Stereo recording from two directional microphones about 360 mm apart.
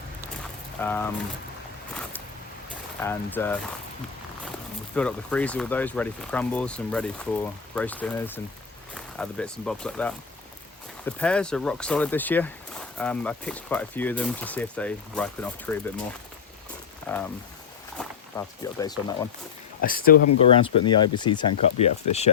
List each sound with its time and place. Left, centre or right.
0.8 s speech: centre
3.0 s speech: centre
4.9 s speech: centre
17.1 s speech: centre
19.8 s speech: left